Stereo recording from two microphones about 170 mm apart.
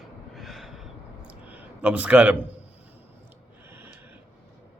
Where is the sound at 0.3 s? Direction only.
Centre (ahead or behind).